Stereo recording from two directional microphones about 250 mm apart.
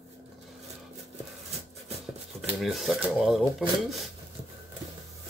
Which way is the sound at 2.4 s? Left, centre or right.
Centre.